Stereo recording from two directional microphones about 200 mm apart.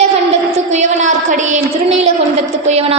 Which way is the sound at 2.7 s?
30° right (ahead or behind).